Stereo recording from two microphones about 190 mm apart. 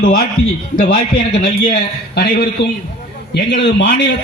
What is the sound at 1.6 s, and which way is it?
A man's voice, 55° left (ahead or behind).